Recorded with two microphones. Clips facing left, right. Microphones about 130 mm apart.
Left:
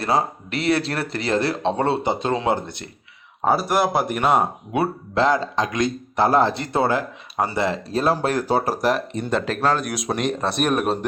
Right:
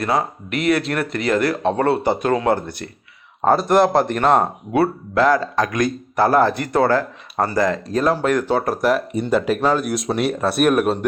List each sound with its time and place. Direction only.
0.0 s speech: 30° left (ahead or behind)
3.4 s speech: 5° left (ahead or behind)
7.5 s speech: 30° left (ahead or behind)
8.4 s speech: 10° left (ahead or behind)
8.8 s speech: centre (ahead or behind)